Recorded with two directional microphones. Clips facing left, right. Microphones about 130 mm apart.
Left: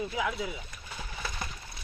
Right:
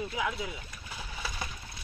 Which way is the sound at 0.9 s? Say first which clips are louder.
Left 1 dB; 5° right (ahead or behind).